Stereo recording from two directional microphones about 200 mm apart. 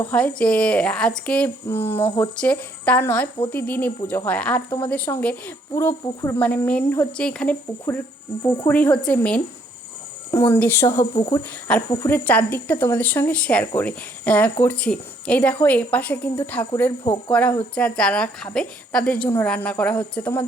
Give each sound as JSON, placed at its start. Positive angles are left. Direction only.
{"t": 0.1, "sound": "a woman's voice", "side_deg": 5}
{"t": 11.7, "sound": "a woman's voice", "side_deg": 10}